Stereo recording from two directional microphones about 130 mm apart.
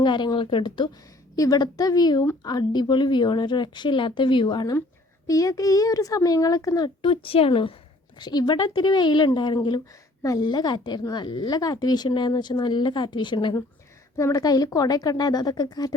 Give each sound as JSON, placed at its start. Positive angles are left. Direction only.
{"t": 0.0, "sound": "a woman's voice", "side_deg": 35}
{"t": 8.2, "sound": "a woman's voice", "side_deg": 30}
{"t": 14.2, "sound": "a child's voice", "side_deg": 25}